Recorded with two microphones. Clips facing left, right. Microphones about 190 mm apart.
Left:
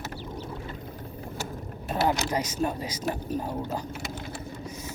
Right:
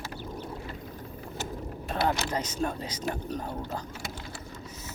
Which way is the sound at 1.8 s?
10° left (ahead or behind).